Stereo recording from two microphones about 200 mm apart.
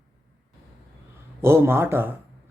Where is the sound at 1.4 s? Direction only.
10° right (ahead or behind).